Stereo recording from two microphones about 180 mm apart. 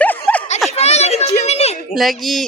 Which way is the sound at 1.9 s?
Centre (ahead or behind).